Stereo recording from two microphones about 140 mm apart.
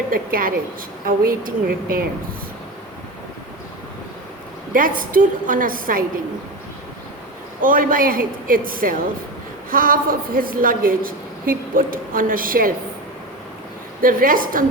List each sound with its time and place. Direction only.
0.1 s a woman's voice: 90° right
4.7 s a woman's voice: 75° right (ahead or behind)
7.6 s a woman's voice: 75° right (ahead or behind)
14.0 s a woman's voice: 90° right